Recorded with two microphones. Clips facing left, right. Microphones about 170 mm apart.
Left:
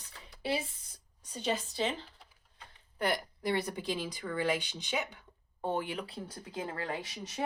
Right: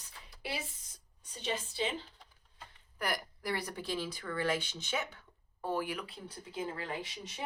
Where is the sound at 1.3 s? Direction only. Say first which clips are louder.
Left 4 dB; 40° left (ahead or behind).